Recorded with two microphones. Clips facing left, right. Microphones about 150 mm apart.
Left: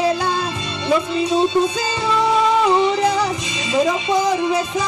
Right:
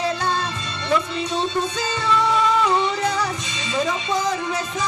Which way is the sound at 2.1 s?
25° left (ahead or behind).